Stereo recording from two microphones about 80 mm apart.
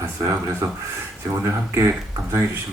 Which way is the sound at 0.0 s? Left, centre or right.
Right.